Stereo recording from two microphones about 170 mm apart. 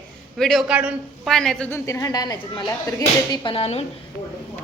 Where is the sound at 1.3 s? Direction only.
5° left (ahead or behind); by 3.8 s 35° left (ahead or behind).